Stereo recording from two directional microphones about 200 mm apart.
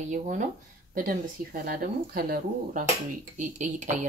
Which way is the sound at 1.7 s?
50° right (ahead or behind).